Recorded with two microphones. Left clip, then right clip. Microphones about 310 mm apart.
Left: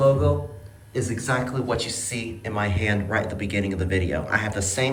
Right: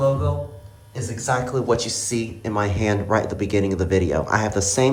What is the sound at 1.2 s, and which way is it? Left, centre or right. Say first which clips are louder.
Speech: right 6 dB; centre.